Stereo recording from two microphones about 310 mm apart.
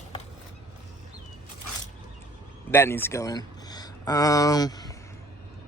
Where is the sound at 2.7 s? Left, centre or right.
Centre.